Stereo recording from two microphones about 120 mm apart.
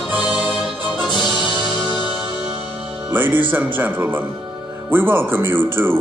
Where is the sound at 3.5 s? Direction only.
15° right (ahead or behind).